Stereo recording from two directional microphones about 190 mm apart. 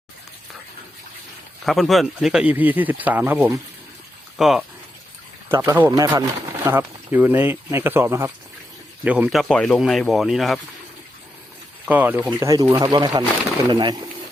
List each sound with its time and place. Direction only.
1.6 s speech: centre (ahead or behind)
5.5 s speech: 20° right (ahead or behind); by 10.6 s centre (ahead or behind)
11.9 s speech: 10° right (ahead or behind)